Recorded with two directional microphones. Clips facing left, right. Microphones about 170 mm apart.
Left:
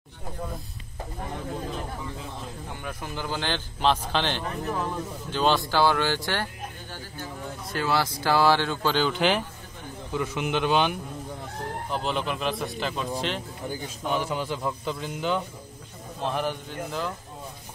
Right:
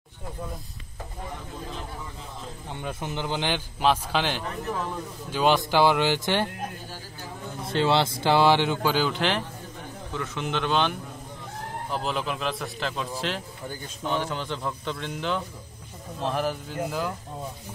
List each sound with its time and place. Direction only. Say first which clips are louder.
2.8 s a man's voice: right 4 dB; 25° right (ahead or behind)
7.6 s a man's voice: right 4 dB; 25° right (ahead or behind); by 11.0 s 10° left (ahead or behind)
11.9 s a man's voice: even; centre (ahead or behind)